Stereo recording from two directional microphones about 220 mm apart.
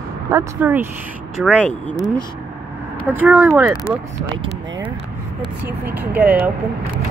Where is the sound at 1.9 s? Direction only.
15° left (ahead or behind).